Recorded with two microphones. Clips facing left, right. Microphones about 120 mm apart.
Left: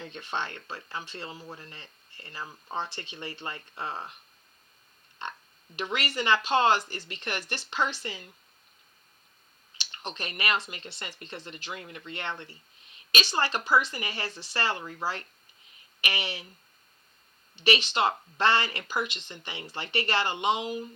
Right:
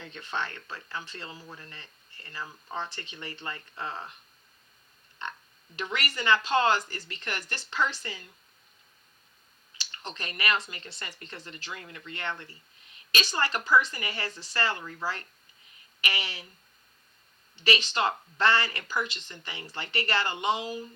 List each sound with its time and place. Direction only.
0.0 s speech: 25° left (ahead or behind)
5.8 s speech: 25° left (ahead or behind)
9.9 s speech: 25° left (ahead or behind)
17.6 s speech: 25° left (ahead or behind)